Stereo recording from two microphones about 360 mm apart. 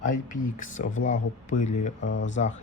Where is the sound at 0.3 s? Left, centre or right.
Left.